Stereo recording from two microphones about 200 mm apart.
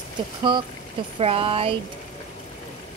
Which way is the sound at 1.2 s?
30° right (ahead or behind).